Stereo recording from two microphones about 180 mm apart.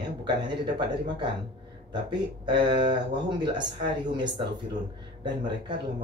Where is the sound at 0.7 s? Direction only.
25° right (ahead or behind).